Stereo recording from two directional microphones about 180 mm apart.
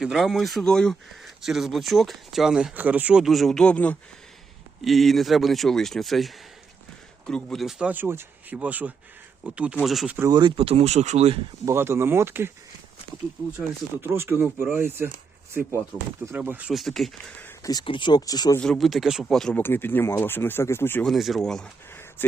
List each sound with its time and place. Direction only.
0.0 s speech: centre (ahead or behind)
10.2 s speech: 20° right (ahead or behind); by 11.3 s 35° right (ahead or behind)
11.6 s speech: 15° right (ahead or behind)
14.0 s speech: 10° right (ahead or behind)
16.2 s speech: 10° right (ahead or behind); by 17.7 s 10° left (ahead or behind)
17.7 s speech: 25° left (ahead or behind)
18.6 s speech: centre (ahead or behind)
21.1 s speech: centre (ahead or behind)